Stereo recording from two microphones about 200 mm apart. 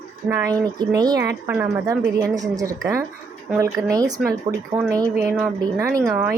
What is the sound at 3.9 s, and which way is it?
A woman's voice, 20° right (ahead or behind).